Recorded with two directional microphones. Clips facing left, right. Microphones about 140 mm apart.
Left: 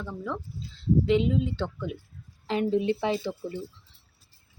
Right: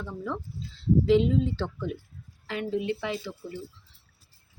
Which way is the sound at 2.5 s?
30° left (ahead or behind).